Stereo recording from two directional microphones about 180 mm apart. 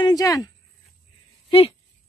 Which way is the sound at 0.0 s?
20° left (ahead or behind).